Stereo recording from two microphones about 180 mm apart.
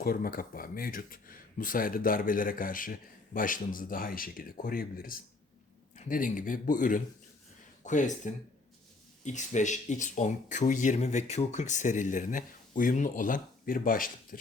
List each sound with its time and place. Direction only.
0.0 s speech: 55° left (ahead or behind)